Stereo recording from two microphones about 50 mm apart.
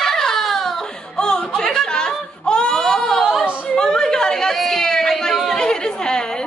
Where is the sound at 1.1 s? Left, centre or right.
Centre.